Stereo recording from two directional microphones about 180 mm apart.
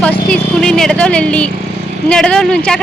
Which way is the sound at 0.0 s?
5° left (ahead or behind).